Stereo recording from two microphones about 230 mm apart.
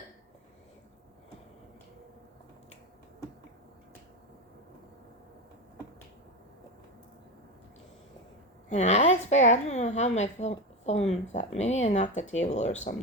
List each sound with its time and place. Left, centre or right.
8.7 s a woman's voice: left